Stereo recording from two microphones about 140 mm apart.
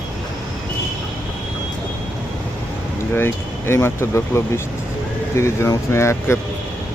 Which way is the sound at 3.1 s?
15° left (ahead or behind).